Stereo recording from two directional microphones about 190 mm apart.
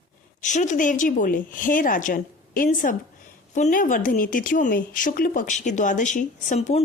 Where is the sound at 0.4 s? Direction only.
40° left (ahead or behind).